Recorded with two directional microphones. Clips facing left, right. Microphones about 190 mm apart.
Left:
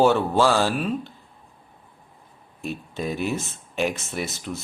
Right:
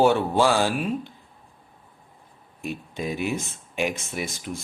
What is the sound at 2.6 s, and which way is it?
Speech, 15° right (ahead or behind).